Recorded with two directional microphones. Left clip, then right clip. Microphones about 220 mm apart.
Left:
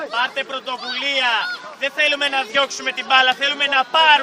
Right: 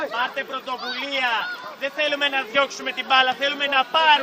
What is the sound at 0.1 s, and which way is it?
Speech, 30° left (ahead or behind).